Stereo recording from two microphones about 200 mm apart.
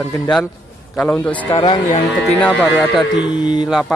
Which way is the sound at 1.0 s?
5° left (ahead or behind).